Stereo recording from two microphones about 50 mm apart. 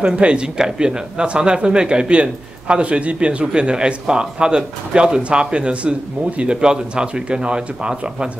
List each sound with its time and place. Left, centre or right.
0.0 s a man's voice: right